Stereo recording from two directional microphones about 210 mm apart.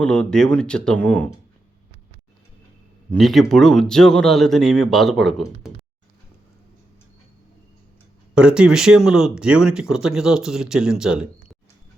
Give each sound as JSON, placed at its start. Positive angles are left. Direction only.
{"t": 0.0, "sound": "speech", "side_deg": 5}
{"t": 3.1, "sound": "speech", "side_deg": 0}
{"t": 8.4, "sound": "speech", "side_deg": -5}